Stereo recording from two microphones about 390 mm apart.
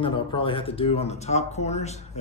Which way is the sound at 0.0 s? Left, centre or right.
Centre.